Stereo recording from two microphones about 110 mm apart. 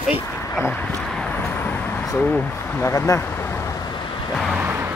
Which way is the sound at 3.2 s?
20° left (ahead or behind).